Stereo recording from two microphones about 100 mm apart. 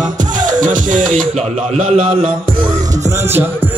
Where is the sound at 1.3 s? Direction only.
80° right.